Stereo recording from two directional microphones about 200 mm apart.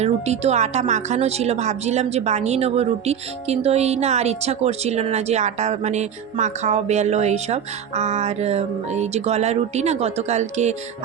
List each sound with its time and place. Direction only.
0.0 s speech: 35° right (ahead or behind)